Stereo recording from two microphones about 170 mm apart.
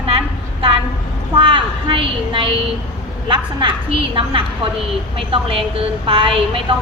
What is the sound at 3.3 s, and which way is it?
A woman's voice, 30° right (ahead or behind).